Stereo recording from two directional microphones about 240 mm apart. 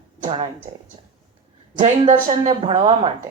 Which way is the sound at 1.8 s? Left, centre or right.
Right.